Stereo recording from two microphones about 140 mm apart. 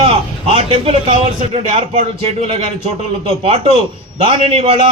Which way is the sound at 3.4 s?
40° right (ahead or behind).